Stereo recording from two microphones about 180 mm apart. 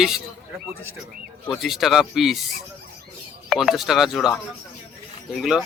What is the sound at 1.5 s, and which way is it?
Speech, centre (ahead or behind).